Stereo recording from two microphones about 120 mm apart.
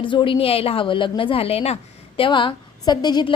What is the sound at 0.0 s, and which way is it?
A woman's voice, 45° left (ahead or behind).